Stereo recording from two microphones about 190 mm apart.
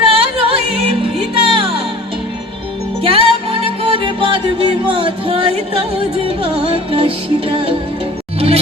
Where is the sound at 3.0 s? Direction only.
30° right (ahead or behind).